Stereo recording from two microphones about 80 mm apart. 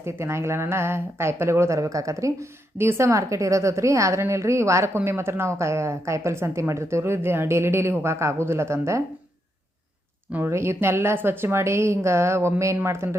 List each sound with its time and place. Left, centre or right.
0.0 s a woman's voice: right
10.3 s a woman's voice: right